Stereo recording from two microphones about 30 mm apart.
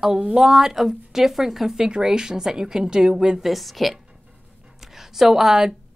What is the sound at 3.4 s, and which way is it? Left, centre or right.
Speech, centre.